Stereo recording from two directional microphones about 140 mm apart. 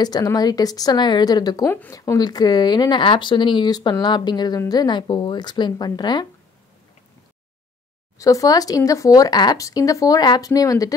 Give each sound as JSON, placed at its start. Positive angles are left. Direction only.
{"t": 0.0, "sound": "speech", "side_deg": 30}
{"t": 8.2, "sound": "speech", "side_deg": 25}